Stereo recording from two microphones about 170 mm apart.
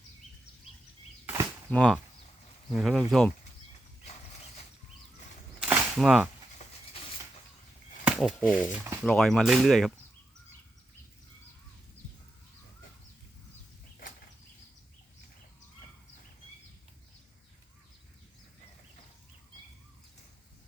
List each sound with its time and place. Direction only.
1.7 s speech: 5° left (ahead or behind)
4.0 s mechanisms: 40° left (ahead or behind)
5.5 s cap gun: 10° right (ahead or behind)
6.0 s speech: centre (ahead or behind)
8.0 s speech: 5° right (ahead or behind)
9.0 s speech: centre (ahead or behind)